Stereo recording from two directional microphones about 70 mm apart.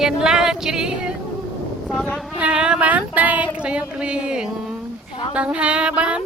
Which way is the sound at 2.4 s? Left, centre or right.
Centre.